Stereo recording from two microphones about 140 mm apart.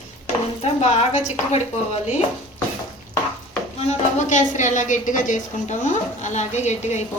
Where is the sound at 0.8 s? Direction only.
50° left (ahead or behind).